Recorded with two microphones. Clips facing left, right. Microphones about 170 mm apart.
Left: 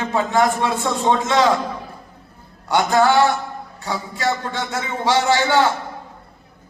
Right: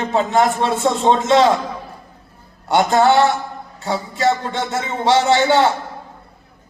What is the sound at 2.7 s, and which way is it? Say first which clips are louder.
A man's voice: right 2 dB; 25° right (ahead or behind).